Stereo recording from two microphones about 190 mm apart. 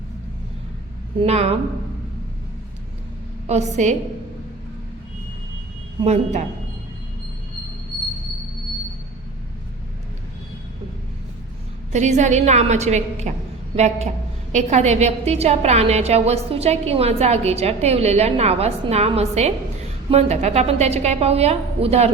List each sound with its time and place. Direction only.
1.2 s a woman's voice: 35° right (ahead or behind)
3.4 s a woman's voice: 35° right (ahead or behind)
6.0 s a woman's voice: 35° right (ahead or behind)
11.9 s a woman's voice: 40° right (ahead or behind)